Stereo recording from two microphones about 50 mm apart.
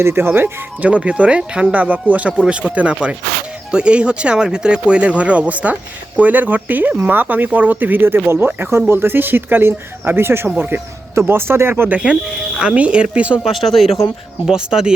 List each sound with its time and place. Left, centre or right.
0.0 s speech: right
0.8 s speech: right
8.4 s speech: right
8.7 s speech: right
11.9 s speech: right
13.4 s speech: centre
14.4 s speech: centre